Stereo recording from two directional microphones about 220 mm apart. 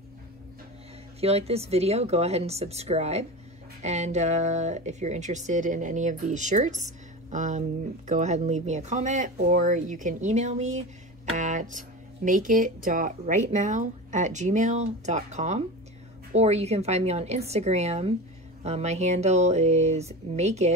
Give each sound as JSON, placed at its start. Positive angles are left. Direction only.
{"t": 1.2, "sound": "speech", "side_deg": -30}